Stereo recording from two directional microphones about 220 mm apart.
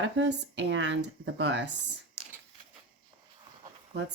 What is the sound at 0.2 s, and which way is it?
Speech, 50° right (ahead or behind).